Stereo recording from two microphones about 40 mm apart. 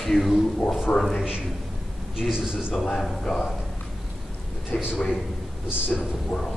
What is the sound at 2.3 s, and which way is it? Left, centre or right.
Speech, centre.